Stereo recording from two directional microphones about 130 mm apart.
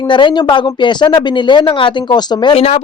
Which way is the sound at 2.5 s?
55° left (ahead or behind).